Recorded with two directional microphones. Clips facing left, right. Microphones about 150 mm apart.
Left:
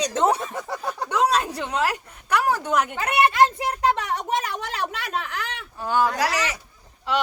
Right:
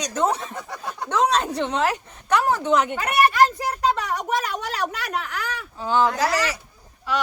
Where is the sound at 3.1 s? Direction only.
20° left (ahead or behind).